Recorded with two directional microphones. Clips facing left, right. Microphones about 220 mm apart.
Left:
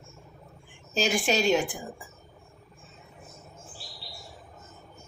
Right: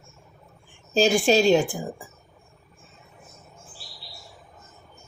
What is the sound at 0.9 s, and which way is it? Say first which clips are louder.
Speech: right 7 dB; 30° right (ahead or behind).